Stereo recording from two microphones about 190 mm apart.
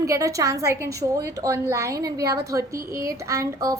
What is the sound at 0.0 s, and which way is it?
A woman's voice, 15° right (ahead or behind).